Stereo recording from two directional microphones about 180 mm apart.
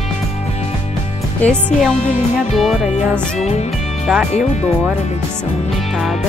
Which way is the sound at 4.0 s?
Centre (ahead or behind).